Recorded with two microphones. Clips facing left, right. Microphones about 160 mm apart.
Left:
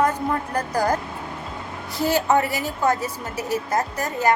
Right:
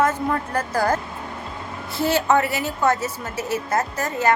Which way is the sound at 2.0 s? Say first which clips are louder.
Even; 15° left (ahead or behind).